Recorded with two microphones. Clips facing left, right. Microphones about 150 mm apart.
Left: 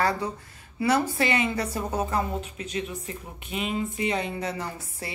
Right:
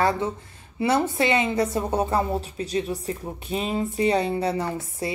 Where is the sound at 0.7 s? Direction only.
25° right (ahead or behind).